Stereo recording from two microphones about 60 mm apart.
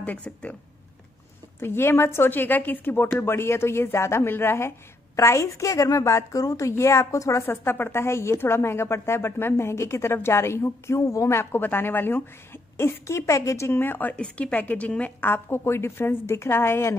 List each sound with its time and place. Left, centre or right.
0.0 s a woman's voice: left
1.6 s speech: left
5.1 s a woman's voice: left
6.7 s a woman's voice: left
7.4 s speech: left
11.6 s speech: left
12.7 s speech: left
14.2 s a woman's voice: left
15.1 s speech: left